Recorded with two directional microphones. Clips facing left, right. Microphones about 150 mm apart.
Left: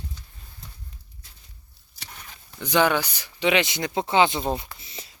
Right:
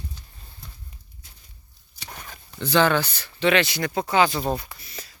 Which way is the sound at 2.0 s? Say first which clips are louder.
Right 5 dB; 55° right (ahead or behind).